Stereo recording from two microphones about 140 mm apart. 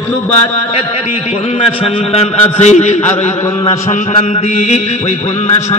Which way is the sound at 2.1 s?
50° left (ahead or behind).